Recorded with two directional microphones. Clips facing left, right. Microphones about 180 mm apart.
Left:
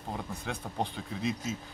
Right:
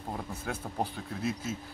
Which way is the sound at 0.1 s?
5° right (ahead or behind).